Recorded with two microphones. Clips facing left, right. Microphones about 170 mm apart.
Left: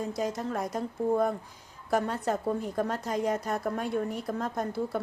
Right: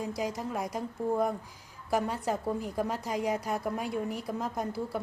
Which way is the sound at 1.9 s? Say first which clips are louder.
Left 2 dB; 10° right (ahead or behind).